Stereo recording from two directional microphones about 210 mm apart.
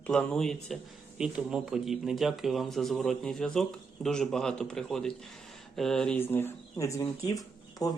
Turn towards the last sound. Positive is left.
turn(degrees=15)  # may be behind; listen again after turning